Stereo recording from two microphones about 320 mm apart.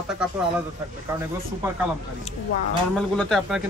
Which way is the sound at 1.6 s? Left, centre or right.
Centre.